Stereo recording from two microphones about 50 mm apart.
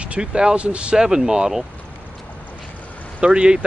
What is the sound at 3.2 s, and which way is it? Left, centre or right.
Speech, right.